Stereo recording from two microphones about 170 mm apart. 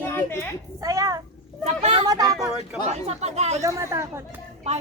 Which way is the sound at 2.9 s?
40° right (ahead or behind).